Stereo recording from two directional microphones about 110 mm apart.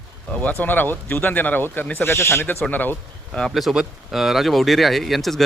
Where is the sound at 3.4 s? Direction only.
Centre (ahead or behind).